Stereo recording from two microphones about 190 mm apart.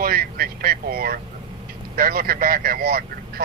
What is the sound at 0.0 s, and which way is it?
Speech, 50° right (ahead or behind).